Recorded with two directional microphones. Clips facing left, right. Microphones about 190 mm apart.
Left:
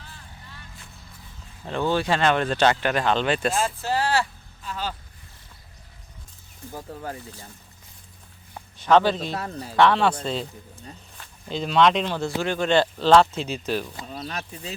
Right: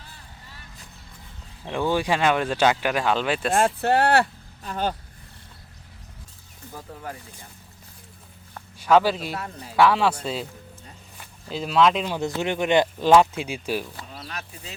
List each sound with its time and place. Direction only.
1.6 s speech: 10° right (ahead or behind)
3.5 s speech: 60° right (ahead or behind)
8.8 s speech: 5° right (ahead or behind)
9.3 s speech: 35° left (ahead or behind)
9.7 s speech: 5° right (ahead or behind)
12.4 s speech: 20° right (ahead or behind)